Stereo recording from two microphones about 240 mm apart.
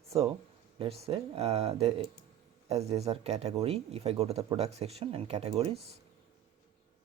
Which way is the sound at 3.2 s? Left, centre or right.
Right.